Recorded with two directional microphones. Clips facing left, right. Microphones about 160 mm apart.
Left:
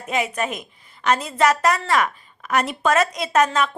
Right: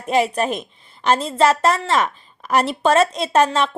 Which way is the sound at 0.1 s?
35° right (ahead or behind).